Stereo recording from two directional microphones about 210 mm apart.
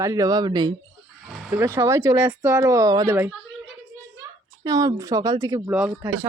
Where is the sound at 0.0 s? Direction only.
15° right (ahead or behind).